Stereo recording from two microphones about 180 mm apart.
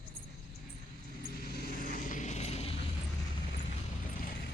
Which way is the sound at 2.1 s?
40° left (ahead or behind).